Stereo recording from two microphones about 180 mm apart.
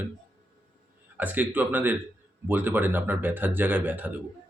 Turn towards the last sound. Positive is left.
turn(degrees=-10)  # may be behind; listen again after turning